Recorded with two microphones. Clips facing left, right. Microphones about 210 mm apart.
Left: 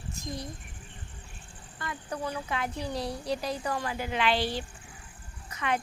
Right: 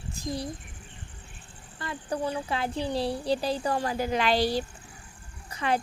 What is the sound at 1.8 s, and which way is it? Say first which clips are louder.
Speech: right 4 dB; 30° right (ahead or behind).